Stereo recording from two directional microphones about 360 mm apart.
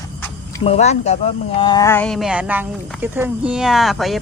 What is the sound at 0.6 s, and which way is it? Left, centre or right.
Speech, centre.